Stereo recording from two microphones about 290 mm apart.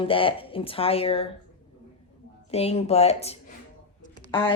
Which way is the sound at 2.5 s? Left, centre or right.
Left.